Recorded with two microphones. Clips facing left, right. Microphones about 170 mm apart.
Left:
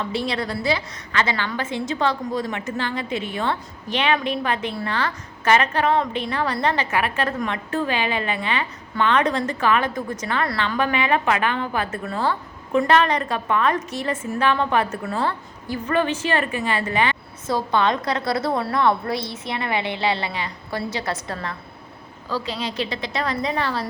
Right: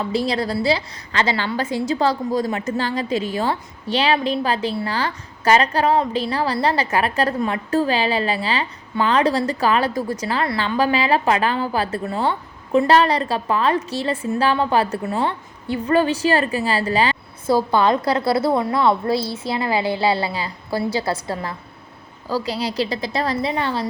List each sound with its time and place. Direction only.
0.0 s a woman's voice: 35° right (ahead or behind)